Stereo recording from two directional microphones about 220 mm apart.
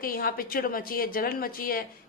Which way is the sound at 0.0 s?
40° left (ahead or behind).